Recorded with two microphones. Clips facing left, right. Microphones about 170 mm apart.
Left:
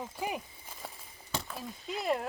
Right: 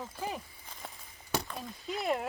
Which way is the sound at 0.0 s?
15° left (ahead or behind).